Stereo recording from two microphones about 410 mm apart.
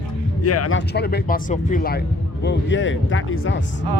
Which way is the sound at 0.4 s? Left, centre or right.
Left.